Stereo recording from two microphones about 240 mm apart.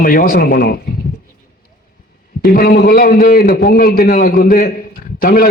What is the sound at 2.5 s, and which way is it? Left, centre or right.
Speech, left.